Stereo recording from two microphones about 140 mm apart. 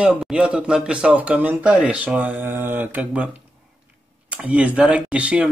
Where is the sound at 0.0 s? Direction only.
5° right (ahead or behind).